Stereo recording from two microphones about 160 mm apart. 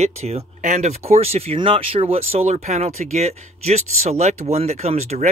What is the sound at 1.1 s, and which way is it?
Speech, 40° right (ahead or behind).